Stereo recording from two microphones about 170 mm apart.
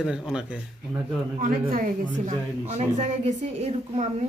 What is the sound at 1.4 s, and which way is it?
A woman's voice, 55° right (ahead or behind).